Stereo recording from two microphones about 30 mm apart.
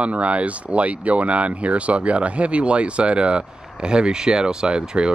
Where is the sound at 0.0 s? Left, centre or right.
Right.